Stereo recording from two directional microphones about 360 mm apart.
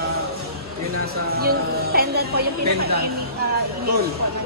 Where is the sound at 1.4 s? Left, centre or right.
Right.